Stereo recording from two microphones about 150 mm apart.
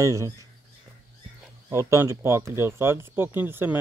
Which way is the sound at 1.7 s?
20° right (ahead or behind).